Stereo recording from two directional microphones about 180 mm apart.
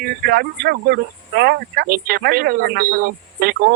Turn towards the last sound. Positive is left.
turn(degrees=-55)  # may be behind; listen again after turning